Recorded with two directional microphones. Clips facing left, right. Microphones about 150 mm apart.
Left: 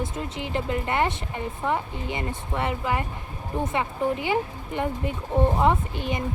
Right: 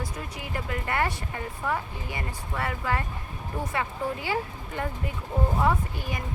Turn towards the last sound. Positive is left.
turn(degrees=20)  # may be behind; listen again after turning